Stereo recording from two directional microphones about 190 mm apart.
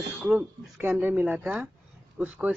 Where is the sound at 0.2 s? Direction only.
5° right (ahead or behind).